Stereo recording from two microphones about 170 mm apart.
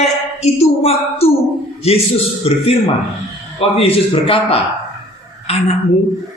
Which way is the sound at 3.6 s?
35° left (ahead or behind).